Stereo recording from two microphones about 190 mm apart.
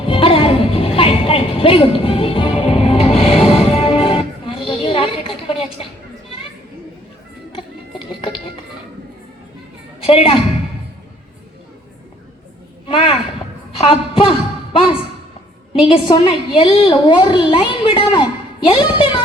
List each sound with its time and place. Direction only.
0.0 s music: 30° left (ahead or behind)
7.5 s music: 30° left (ahead or behind)
10.0 s a woman's voice: 30° left (ahead or behind)
12.9 s a sound: 30° left (ahead or behind)
15.8 s a woman's voice: 30° left (ahead or behind)
18.1 s a sound: 25° left (ahead or behind)